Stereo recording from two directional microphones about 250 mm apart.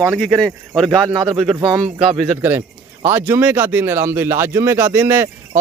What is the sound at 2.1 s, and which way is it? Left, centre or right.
Speech, centre.